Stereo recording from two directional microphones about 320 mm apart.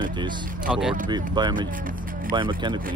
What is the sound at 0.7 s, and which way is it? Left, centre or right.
Speech, centre.